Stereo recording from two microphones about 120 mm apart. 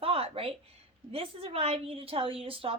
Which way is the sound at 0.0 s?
50° right (ahead or behind).